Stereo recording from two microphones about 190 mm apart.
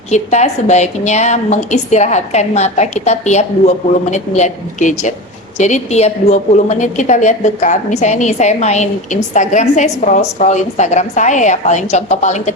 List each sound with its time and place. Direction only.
0.1 s a woman's voice: 35° left (ahead or behind)